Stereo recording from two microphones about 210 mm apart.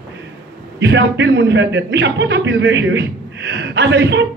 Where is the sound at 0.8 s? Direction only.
55° right (ahead or behind).